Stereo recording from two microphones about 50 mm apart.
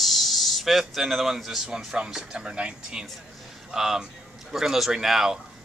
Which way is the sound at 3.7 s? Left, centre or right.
Centre.